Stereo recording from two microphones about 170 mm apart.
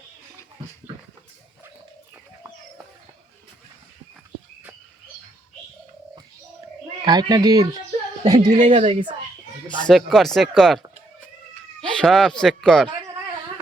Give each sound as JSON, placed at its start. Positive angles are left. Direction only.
{"t": 7.0, "sound": "speech", "side_deg": -25}
{"t": 8.5, "sound": "speech", "side_deg": -35}
{"t": 9.6, "sound": "a sound", "side_deg": 25}
{"t": 9.9, "sound": "speech", "side_deg": 0}
{"t": 11.8, "sound": "speech", "side_deg": 5}